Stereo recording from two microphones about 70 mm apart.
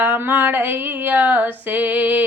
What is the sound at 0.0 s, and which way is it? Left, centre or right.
Female singing, right.